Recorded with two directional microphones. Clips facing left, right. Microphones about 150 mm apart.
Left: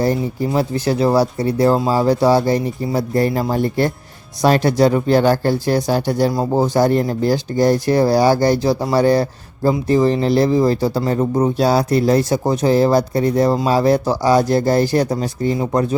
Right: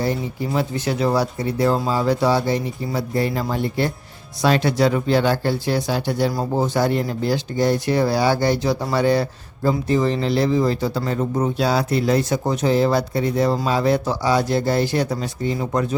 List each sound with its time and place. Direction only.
0.0 s speech: 40° left (ahead or behind)